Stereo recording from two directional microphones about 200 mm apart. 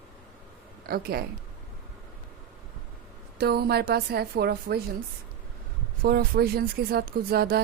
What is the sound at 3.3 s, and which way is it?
Speech, 55° right (ahead or behind).